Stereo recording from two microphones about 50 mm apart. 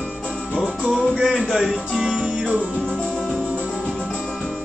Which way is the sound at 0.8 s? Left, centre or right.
Centre.